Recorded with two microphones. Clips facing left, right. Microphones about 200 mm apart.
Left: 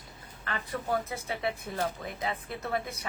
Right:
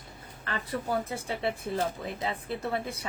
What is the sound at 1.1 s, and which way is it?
A woman's voice, 30° right (ahead or behind).